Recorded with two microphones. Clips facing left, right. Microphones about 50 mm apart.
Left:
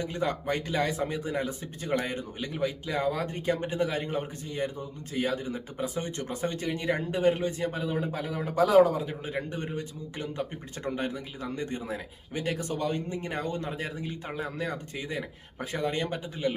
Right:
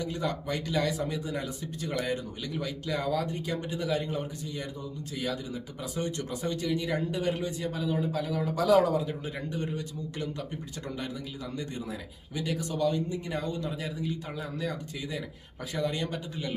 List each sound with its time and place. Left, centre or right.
0.0 s speech: left